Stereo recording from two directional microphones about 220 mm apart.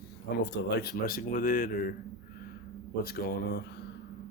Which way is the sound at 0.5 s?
45° left (ahead or behind).